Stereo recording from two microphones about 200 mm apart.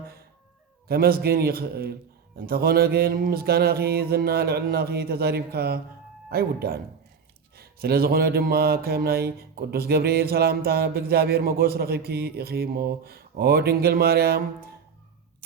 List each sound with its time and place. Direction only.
0.9 s mantra: 50° right (ahead or behind)